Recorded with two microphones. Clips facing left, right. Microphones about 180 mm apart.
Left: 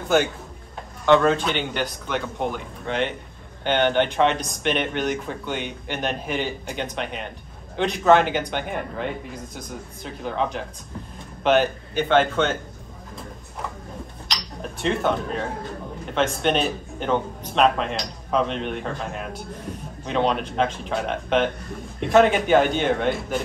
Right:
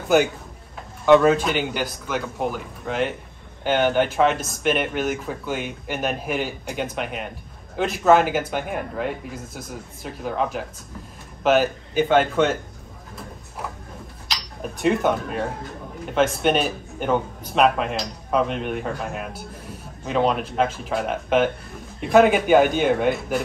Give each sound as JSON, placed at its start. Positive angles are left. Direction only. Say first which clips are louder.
{"t": 1.0, "sound": "speech", "louder": "right 3 dB", "side_deg": -5}
{"t": 14.2, "sound": "a sound", "louder": "right 2 dB", "side_deg": -5}
{"t": 16.2, "sound": "speech", "louder": "right 2 dB", "side_deg": -5}